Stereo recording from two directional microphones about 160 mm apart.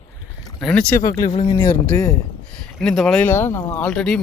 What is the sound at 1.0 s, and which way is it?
Speech, 20° left (ahead or behind).